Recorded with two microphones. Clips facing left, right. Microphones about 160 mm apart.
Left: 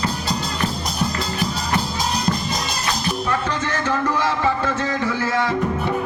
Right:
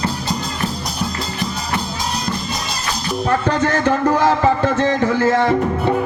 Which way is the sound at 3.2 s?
45° right (ahead or behind).